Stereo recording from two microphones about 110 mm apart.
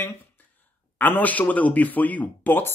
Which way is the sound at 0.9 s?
15° left (ahead or behind).